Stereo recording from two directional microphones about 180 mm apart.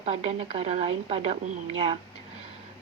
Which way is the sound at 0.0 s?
35° right (ahead or behind).